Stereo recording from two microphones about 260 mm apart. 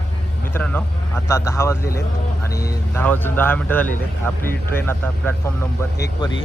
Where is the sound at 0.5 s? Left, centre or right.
Centre.